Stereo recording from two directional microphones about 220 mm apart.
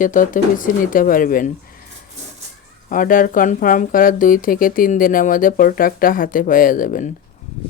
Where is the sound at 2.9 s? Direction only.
40° left (ahead or behind).